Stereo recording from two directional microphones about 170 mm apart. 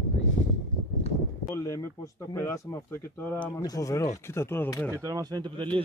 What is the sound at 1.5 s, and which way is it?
Speech, 20° left (ahead or behind).